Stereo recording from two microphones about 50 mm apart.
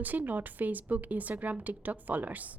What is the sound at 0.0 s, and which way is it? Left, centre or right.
Speech, right.